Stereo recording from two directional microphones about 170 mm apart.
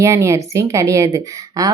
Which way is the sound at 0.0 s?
15° right (ahead or behind).